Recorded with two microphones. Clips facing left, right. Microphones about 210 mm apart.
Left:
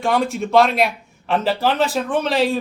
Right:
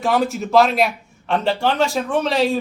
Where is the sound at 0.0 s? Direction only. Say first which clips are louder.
Even; centre (ahead or behind).